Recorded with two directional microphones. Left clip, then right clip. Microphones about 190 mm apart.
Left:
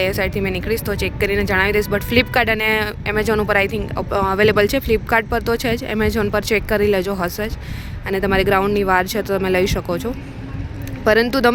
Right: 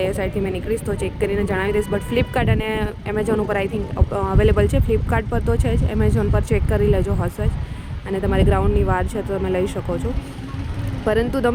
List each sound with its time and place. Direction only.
0.2 s speech: centre (ahead or behind)
11.0 s speech: 5° left (ahead or behind)